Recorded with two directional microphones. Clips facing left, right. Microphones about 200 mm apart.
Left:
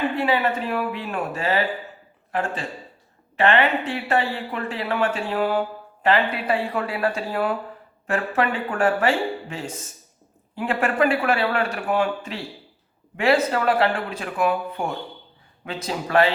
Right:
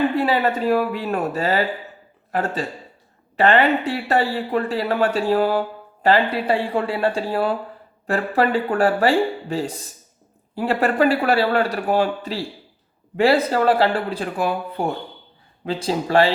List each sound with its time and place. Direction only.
0.2 s speech: 40° right (ahead or behind)